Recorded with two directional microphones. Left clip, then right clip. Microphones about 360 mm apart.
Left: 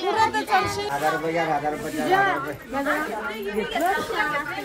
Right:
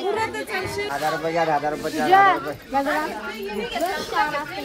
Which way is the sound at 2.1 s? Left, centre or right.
Centre.